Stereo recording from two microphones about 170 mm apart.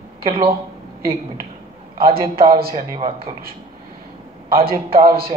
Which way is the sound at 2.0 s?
60° right (ahead or behind).